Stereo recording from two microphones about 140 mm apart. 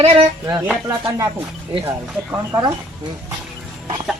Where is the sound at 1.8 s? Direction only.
15° right (ahead or behind).